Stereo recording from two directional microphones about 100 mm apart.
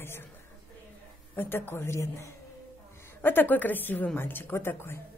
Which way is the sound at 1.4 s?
20° left (ahead or behind).